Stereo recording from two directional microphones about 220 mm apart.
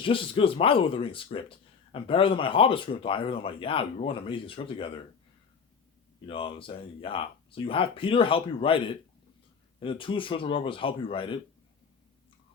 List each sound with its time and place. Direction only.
0.0 s speech: 25° left (ahead or behind)
6.2 s speech: 25° left (ahead or behind)